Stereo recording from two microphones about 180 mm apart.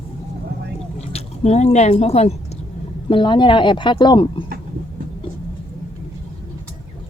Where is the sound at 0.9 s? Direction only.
35° left (ahead or behind).